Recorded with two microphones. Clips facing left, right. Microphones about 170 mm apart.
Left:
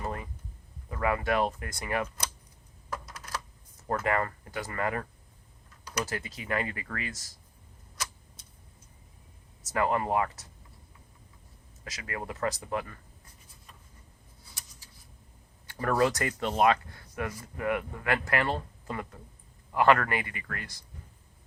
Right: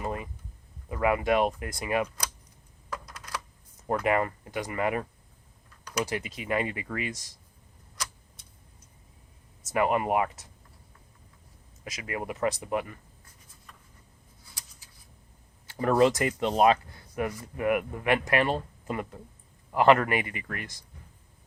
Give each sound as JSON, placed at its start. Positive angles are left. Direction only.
{"t": 0.0, "sound": "a sound", "side_deg": -20}
{"t": 0.9, "sound": "speech", "side_deg": -15}
{"t": 3.8, "sound": "speech", "side_deg": -15}
{"t": 6.1, "sound": "speech", "side_deg": -20}
{"t": 9.7, "sound": "speech", "side_deg": -15}
{"t": 11.9, "sound": "speech", "side_deg": -20}
{"t": 15.7, "sound": "speech", "side_deg": -20}